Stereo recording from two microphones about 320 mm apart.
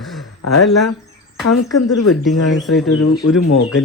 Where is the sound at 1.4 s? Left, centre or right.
Left.